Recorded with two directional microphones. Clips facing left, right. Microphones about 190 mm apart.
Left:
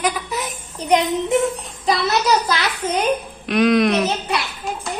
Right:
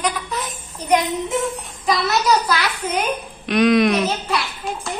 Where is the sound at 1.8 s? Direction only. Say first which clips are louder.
Even; 25° left (ahead or behind).